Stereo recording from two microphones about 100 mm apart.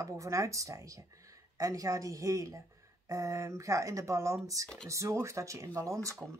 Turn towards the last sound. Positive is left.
turn(degrees=-30)  # may be behind; listen again after turning